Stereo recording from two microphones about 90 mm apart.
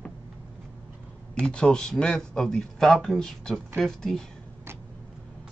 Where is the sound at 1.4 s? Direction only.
10° left (ahead or behind).